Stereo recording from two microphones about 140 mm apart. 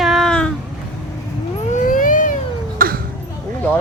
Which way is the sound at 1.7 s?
70° left (ahead or behind).